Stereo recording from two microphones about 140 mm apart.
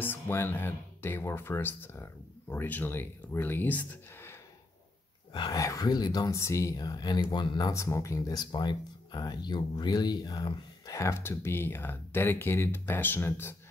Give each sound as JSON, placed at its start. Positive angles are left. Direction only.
{"t": 0.0, "sound": "speech", "side_deg": 15}
{"t": 5.3, "sound": "speech", "side_deg": 30}